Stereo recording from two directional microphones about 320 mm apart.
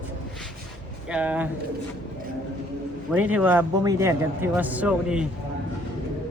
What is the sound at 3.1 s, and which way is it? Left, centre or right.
A man's voice, centre.